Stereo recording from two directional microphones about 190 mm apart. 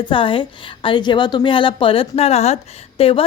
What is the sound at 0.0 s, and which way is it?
A woman's voice, 25° left (ahead or behind).